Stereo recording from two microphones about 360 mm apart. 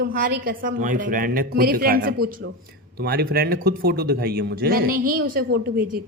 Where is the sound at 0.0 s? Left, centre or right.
Right.